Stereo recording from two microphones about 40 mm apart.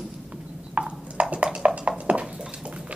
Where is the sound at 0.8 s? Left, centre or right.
Right.